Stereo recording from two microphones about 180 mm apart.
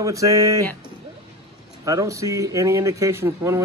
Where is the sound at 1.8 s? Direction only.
15° right (ahead or behind).